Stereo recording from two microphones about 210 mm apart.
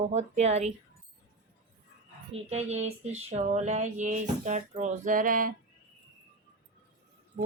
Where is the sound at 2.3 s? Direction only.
30° right (ahead or behind).